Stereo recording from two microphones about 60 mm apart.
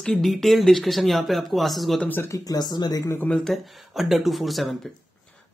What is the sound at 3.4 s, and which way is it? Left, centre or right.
Speech, centre.